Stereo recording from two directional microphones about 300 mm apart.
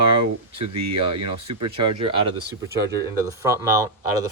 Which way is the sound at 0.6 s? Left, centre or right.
Right.